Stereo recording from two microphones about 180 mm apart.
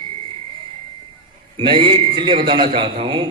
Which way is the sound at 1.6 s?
30° right (ahead or behind).